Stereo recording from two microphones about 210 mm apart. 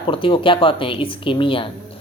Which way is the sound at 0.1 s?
25° left (ahead or behind).